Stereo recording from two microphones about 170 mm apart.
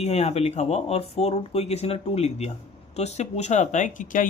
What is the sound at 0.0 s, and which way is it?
Speech, 40° left (ahead or behind).